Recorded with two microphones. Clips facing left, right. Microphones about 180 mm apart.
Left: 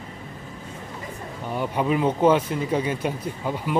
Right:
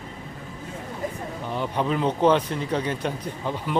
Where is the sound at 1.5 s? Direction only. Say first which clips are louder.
Left 2 dB; 10° left (ahead or behind).